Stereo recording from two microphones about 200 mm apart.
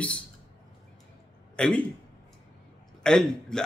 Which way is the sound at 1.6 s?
5° left (ahead or behind).